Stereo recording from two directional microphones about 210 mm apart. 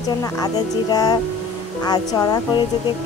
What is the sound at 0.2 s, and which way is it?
Speech, 20° left (ahead or behind).